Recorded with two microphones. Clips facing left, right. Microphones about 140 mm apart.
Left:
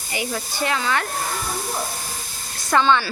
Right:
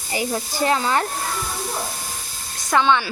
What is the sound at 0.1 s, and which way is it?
Speech, 35° right (ahead or behind).